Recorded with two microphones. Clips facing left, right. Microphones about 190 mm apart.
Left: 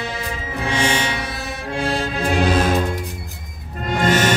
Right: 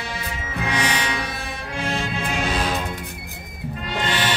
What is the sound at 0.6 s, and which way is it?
Music, 25° left (ahead or behind).